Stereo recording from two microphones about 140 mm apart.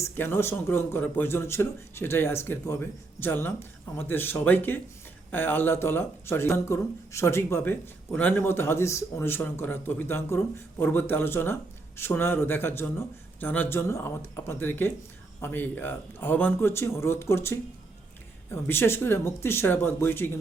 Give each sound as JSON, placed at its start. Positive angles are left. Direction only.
{"t": 0.0, "sound": "speech", "side_deg": 15}